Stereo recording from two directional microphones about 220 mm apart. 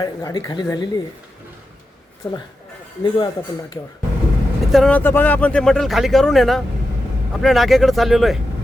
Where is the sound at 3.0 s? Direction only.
20° left (ahead or behind).